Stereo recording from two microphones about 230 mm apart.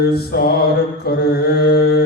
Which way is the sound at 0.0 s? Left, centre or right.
Left.